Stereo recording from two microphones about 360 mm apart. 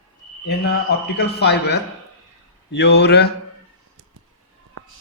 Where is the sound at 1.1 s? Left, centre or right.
Left.